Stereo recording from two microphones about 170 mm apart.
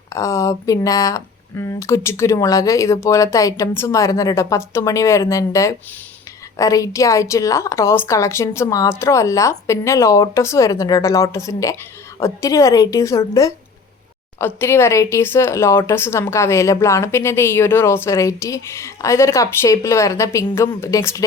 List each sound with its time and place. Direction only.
0.1 s a woman's voice: 20° left (ahead or behind)